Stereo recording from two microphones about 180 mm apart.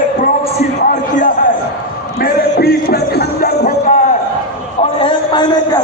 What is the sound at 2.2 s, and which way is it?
Music, 60° left (ahead or behind).